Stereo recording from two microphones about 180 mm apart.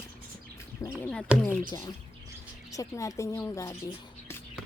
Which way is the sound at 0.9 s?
5° left (ahead or behind).